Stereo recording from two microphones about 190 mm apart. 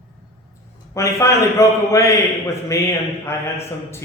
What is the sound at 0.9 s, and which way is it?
A man's voice, 15° left (ahead or behind).